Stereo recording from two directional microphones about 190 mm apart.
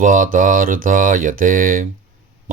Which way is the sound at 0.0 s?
45° right (ahead or behind).